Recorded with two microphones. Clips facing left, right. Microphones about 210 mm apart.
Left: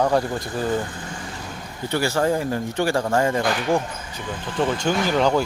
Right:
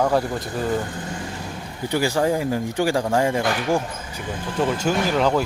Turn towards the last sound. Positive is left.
turn(degrees=0)  # may be behind; listen again after turning